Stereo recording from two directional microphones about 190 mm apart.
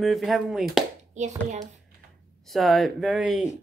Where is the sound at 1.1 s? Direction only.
40° right (ahead or behind).